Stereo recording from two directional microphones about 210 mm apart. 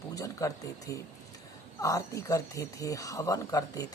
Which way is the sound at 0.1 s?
15° left (ahead or behind).